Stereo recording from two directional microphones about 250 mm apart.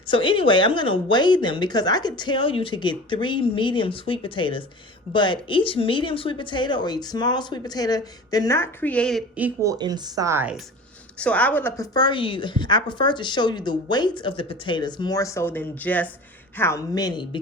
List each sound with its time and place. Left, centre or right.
0.1 s a woman's voice: centre
9.7 s speech: centre
11.2 s a woman's voice: centre